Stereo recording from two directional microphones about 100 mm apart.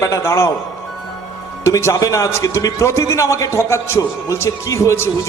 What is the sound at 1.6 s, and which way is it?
A man's voice, 30° left (ahead or behind).